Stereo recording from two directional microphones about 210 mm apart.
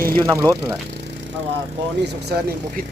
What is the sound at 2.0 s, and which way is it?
Speech, 50° right (ahead or behind).